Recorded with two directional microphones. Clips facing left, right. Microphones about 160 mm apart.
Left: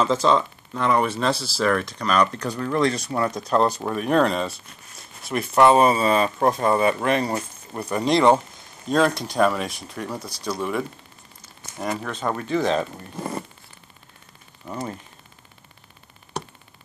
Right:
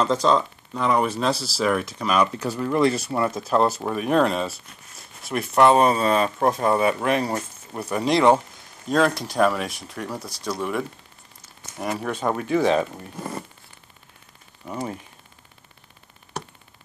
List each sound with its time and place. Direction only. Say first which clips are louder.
0.0 s speech: even; centre (ahead or behind)
13.1 s zipper: left 2 dB; 25° left (ahead or behind)
14.7 s speech: right 1 dB; 10° right (ahead or behind)